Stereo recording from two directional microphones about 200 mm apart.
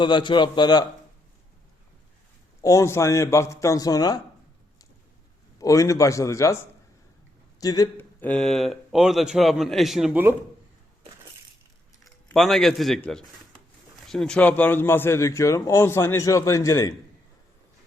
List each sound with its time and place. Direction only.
0.0 s a man's voice: 25° left (ahead or behind)
2.6 s a man's voice: 15° left (ahead or behind)
5.5 s a man's voice: 15° left (ahead or behind)
7.6 s speech: 20° left (ahead or behind); by 10.3 s 10° right (ahead or behind)
12.3 s a man's voice: centre (ahead or behind)